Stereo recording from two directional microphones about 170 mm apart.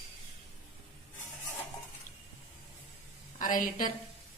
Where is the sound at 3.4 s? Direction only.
50° left (ahead or behind).